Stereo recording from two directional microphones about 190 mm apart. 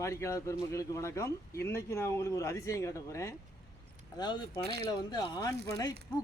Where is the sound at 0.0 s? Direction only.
15° left (ahead or behind).